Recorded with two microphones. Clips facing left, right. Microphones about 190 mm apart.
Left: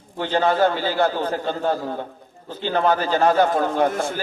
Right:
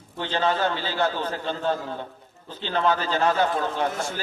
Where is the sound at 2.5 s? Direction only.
10° left (ahead or behind).